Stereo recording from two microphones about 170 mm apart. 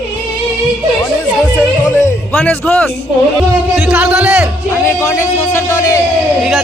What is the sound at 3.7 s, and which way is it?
Speech, 5° right (ahead or behind).